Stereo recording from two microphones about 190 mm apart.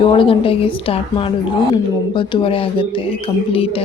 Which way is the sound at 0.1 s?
30° left (ahead or behind).